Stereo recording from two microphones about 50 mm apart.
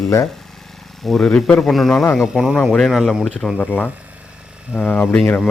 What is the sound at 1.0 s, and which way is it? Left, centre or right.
Speech, centre.